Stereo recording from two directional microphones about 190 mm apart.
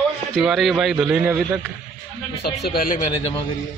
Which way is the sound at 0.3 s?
Centre (ahead or behind).